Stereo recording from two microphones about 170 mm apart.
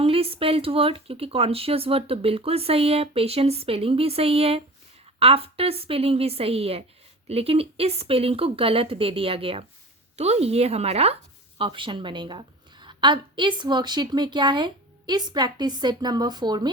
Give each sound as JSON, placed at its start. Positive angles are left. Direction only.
{"t": 0.0, "sound": "speech", "side_deg": -35}